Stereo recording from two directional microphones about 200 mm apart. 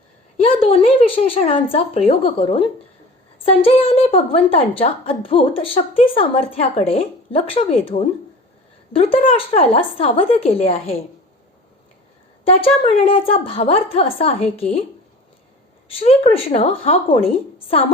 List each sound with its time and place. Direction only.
0.4 s a woman's voice: 30° left (ahead or behind)
12.5 s a woman's voice: 25° left (ahead or behind)
15.9 s a woman's voice: 30° left (ahead or behind)